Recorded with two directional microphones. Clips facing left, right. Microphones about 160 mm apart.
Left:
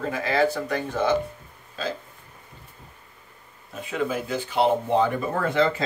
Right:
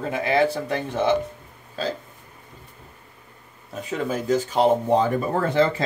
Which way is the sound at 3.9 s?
40° right (ahead or behind).